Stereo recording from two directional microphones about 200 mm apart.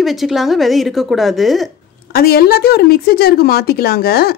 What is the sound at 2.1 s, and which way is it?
A woman's voice, 50° left (ahead or behind).